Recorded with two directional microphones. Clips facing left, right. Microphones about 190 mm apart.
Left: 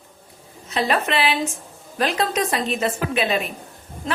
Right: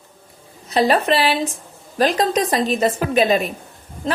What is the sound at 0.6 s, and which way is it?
A woman's voice, 35° right (ahead or behind).